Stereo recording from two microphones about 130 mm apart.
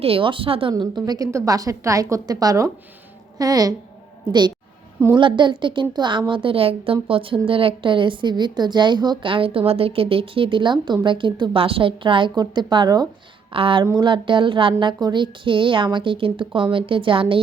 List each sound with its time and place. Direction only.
0.0 s speech: 45° right (ahead or behind)
0.7 s a woman's voice: 30° right (ahead or behind)
13.5 s a woman's voice: 45° right (ahead or behind)